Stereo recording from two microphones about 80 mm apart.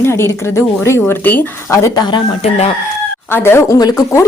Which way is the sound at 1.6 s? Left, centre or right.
Left.